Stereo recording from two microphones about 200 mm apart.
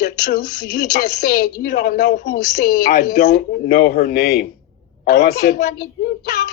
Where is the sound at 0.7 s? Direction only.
55° left (ahead or behind).